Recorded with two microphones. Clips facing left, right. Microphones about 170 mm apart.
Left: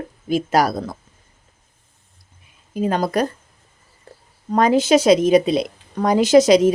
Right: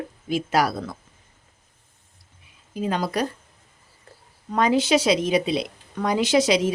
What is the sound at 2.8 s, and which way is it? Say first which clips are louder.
Speech: left 5 dB; 45° left (ahead or behind).